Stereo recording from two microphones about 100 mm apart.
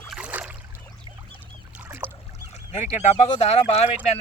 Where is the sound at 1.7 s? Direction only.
20° right (ahead or behind).